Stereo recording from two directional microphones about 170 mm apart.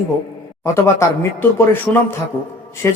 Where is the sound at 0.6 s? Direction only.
15° left (ahead or behind).